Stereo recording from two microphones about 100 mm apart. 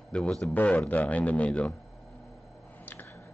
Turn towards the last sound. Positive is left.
turn(degrees=20)  # may be behind; listen again after turning